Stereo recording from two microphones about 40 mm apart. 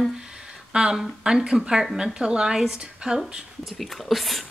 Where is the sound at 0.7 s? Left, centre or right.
Right.